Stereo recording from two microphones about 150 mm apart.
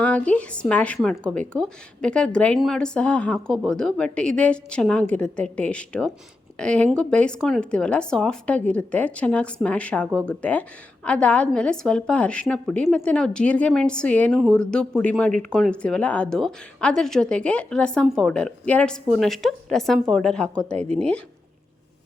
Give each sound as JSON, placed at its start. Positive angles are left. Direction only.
{"t": 0.0, "sound": "a woman's voice", "side_deg": 10}
{"t": 20.7, "sound": "speech", "side_deg": -45}